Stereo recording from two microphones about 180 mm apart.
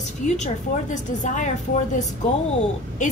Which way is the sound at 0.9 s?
45° left (ahead or behind).